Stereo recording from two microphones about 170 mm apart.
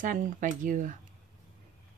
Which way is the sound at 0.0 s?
50° right (ahead or behind).